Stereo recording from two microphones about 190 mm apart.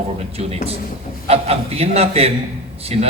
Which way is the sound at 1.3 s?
30° right (ahead or behind).